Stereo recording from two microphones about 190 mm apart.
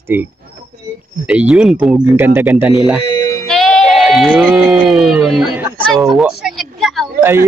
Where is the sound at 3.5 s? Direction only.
Centre (ahead or behind).